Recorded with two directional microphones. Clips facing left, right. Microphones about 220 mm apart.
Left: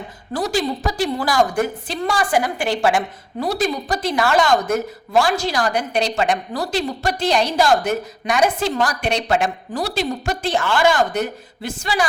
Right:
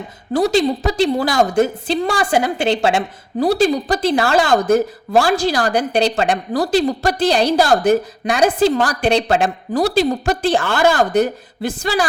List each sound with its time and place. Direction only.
0.3 s a woman's voice: 25° right (ahead or behind)